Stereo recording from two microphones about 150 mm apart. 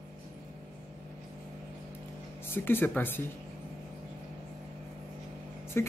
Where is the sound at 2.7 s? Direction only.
15° left (ahead or behind).